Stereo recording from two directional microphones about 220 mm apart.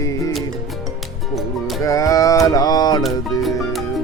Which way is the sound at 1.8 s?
15° left (ahead or behind).